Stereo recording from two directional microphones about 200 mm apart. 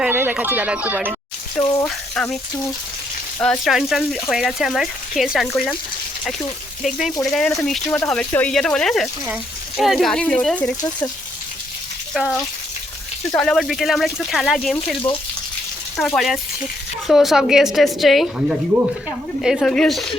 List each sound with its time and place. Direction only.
0.0 s speech: 10° right (ahead or behind)
1.8 s speech: 5° left (ahead or behind)
7.3 s speech: centre (ahead or behind)
10.8 s speech: 20° left (ahead or behind)
12.1 s speech: centre (ahead or behind)
16.0 s speech: centre (ahead or behind)